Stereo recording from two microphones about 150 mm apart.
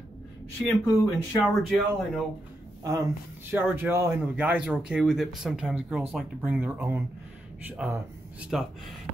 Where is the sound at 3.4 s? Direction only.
15° right (ahead or behind).